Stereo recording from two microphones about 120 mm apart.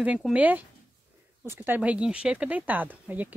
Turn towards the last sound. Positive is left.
turn(degrees=-15)  # may be behind; listen again after turning